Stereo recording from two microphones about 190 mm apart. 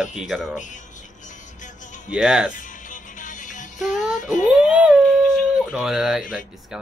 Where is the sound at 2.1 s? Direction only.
5° right (ahead or behind).